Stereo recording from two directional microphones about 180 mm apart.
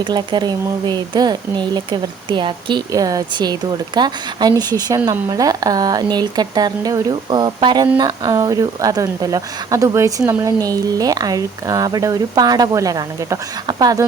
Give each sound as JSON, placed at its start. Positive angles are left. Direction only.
{"t": 0.0, "sound": "a woman's voice", "side_deg": -25}